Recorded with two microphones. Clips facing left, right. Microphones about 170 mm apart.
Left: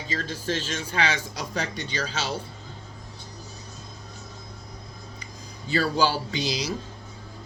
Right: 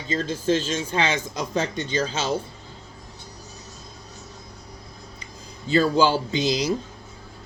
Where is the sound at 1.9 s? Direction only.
50° right (ahead or behind).